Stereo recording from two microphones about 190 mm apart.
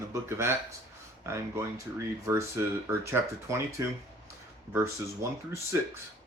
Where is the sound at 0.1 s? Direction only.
15° right (ahead or behind).